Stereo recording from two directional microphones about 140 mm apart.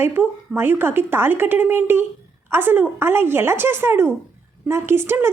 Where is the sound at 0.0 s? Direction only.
15° right (ahead or behind).